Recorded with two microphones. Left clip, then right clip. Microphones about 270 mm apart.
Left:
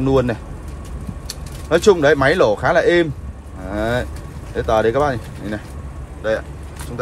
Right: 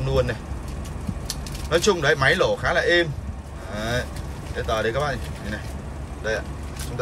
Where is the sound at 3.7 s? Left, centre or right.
Left.